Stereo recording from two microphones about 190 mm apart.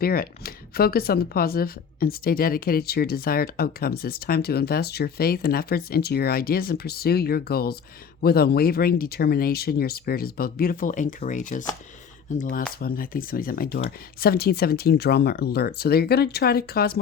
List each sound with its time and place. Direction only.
0.0 s a woman's voice: 50° left (ahead or behind)